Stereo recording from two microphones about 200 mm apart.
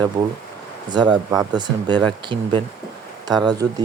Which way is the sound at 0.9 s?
20° right (ahead or behind).